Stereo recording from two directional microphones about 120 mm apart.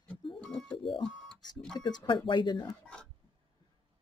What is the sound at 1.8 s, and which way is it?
Speech, 35° left (ahead or behind).